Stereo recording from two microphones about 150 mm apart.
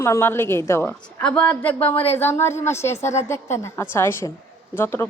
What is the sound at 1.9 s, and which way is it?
Speech, 40° left (ahead or behind).